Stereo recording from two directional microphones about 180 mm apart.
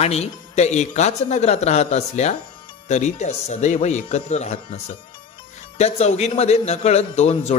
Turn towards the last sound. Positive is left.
turn(degrees=40)  # may be behind; listen again after turning